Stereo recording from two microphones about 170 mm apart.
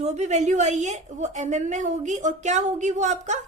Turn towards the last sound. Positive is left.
turn(degrees=-45)  # may be behind; listen again after turning